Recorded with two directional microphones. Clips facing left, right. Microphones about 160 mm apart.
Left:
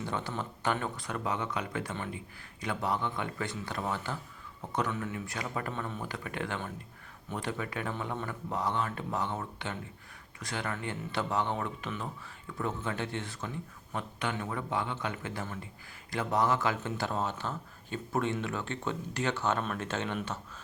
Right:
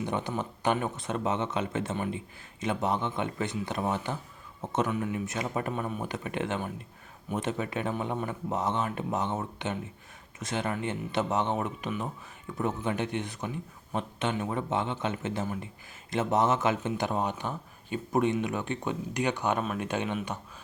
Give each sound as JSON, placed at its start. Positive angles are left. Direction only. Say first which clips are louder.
{"t": 0.0, "sound": "speech", "louder": "right 4 dB", "side_deg": -20}